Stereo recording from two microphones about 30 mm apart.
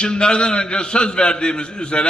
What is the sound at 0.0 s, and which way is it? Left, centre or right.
A man's voice, left.